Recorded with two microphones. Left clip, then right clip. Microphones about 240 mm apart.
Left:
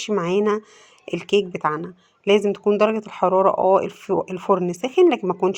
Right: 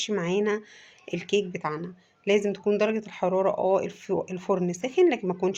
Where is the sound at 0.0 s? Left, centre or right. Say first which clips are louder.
Left 6 dB; left.